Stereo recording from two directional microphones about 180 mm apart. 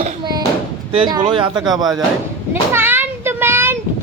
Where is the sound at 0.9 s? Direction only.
25° right (ahead or behind).